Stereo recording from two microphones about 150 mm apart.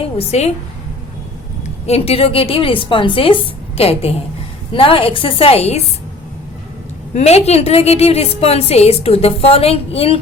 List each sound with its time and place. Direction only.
0.2 s a woman's voice: 45° left (ahead or behind)
1.9 s a woman's voice: 40° left (ahead or behind)
7.1 s a woman's voice: 45° left (ahead or behind)